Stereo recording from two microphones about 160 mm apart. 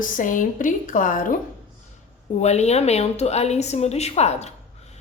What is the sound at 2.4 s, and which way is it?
A woman's voice, 45° left (ahead or behind).